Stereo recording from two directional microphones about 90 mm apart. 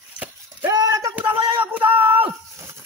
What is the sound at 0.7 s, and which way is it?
Speech, 40° right (ahead or behind).